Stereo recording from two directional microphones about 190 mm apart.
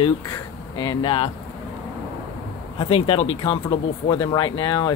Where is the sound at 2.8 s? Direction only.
30° left (ahead or behind).